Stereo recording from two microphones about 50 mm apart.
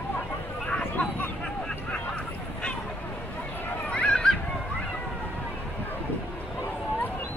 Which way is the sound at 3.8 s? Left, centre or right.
Left.